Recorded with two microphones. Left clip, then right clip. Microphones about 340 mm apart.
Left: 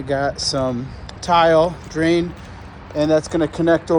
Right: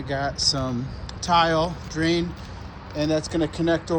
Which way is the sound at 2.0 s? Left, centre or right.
Left.